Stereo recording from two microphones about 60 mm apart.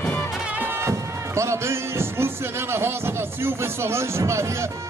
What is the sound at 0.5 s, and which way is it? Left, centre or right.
Music, right.